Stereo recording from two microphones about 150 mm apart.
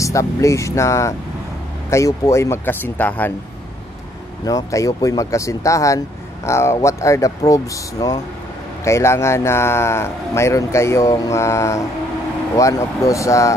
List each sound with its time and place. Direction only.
0.0 s a man's voice: 20° left (ahead or behind)
4.5 s a man's voice: 25° left (ahead or behind)